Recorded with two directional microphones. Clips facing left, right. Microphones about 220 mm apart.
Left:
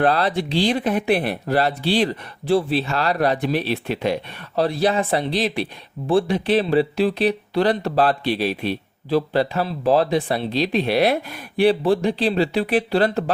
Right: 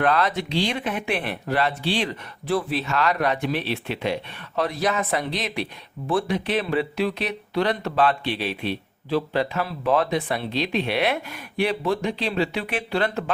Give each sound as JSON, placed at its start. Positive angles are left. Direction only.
{"t": 0.0, "sound": "speech", "side_deg": 30}